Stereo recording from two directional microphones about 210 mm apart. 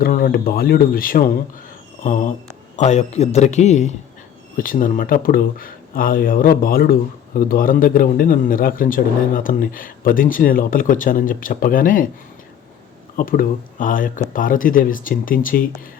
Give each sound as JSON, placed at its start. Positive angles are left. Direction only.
{"t": 0.0, "sound": "a man's voice", "side_deg": 45}
{"t": 13.1, "sound": "a man's voice", "side_deg": 40}